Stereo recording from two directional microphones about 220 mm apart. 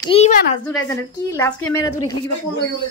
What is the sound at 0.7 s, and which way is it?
A woman's voice, 10° left (ahead or behind).